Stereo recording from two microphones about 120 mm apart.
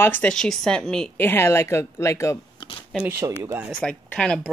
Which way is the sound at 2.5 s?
45° left (ahead or behind).